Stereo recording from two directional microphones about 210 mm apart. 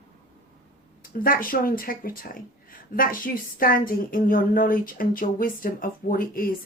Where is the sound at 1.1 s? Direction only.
45° left (ahead or behind).